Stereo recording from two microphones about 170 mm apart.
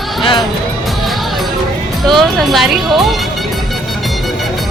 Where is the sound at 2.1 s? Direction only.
Centre (ahead or behind).